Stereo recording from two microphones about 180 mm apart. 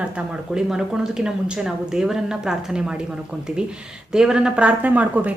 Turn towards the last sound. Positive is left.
turn(degrees=-10)  # may be behind; listen again after turning